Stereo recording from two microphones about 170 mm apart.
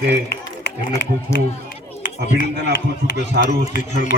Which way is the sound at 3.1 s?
85° right.